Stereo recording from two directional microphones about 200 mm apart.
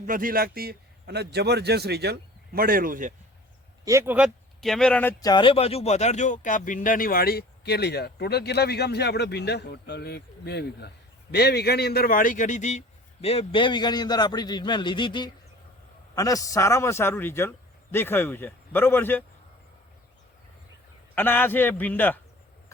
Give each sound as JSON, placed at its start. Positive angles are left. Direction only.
{"t": 0.0, "sound": "a man's voice", "side_deg": -45}
{"t": 3.8, "sound": "speech", "side_deg": -10}
{"t": 5.3, "sound": "a man's voice", "side_deg": 25}
{"t": 21.2, "sound": "a man's voice", "side_deg": 10}